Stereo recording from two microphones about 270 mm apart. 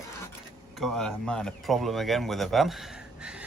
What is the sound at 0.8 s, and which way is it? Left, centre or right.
Speech, centre.